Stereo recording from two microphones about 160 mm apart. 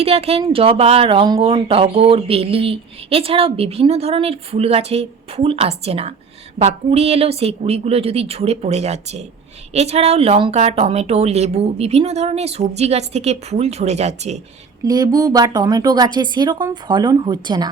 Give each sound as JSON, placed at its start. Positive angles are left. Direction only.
{"t": 0.0, "sound": "speech", "side_deg": -40}
{"t": 14.8, "sound": "speech", "side_deg": -25}